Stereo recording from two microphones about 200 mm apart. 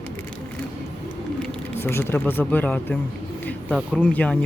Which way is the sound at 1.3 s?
10° left (ahead or behind).